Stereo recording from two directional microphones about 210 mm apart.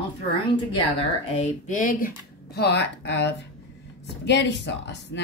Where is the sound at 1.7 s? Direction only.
40° left (ahead or behind).